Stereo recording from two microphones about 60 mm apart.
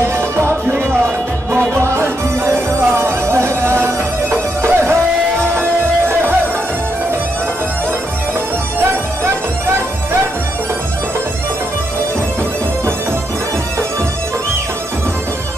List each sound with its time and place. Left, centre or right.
0.0 s music: right